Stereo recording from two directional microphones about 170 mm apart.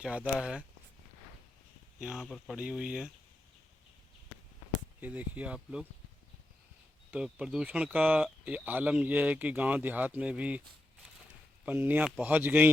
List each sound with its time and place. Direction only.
0.0 s speech: 5° right (ahead or behind)
2.0 s speech: 5° right (ahead or behind)
4.9 s speech: 10° right (ahead or behind)
7.1 s speech: 5° right (ahead or behind)
11.6 s speech: 10° right (ahead or behind)